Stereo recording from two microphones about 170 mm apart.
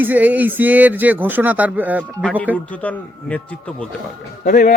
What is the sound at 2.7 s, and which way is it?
Speech, 10° left (ahead or behind).